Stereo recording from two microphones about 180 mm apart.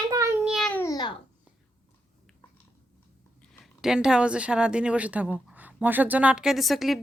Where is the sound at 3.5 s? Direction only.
Centre (ahead or behind).